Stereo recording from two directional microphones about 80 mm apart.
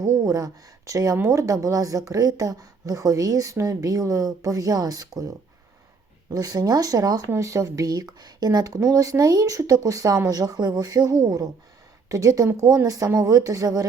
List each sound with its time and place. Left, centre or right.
0.0 s speech: right
6.3 s speech: right
7.3 s speech: right